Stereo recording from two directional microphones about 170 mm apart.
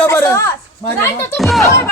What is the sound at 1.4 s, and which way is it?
Speech, centre (ahead or behind).